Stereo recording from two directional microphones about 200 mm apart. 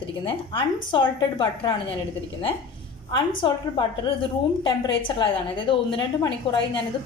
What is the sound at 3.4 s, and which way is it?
A woman's voice, 25° left (ahead or behind).